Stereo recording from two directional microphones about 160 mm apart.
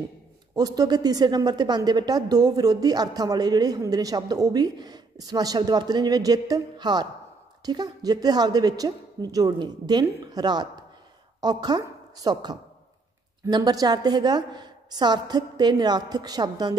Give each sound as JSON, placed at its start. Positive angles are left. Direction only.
{"t": 0.6, "sound": "a woman's voice", "side_deg": -20}